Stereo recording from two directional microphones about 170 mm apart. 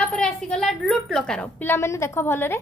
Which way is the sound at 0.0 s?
5° left (ahead or behind).